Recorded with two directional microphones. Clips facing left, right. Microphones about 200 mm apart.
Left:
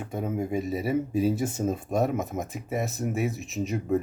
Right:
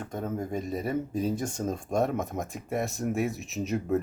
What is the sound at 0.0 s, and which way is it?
Speech, 10° left (ahead or behind).